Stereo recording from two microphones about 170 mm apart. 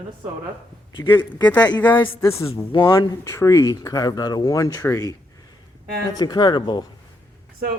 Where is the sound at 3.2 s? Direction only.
15° left (ahead or behind).